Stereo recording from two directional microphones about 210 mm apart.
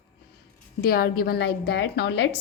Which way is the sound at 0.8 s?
45° left (ahead or behind).